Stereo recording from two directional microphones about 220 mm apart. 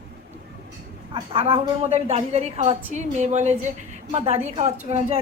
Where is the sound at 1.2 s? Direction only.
25° right (ahead or behind).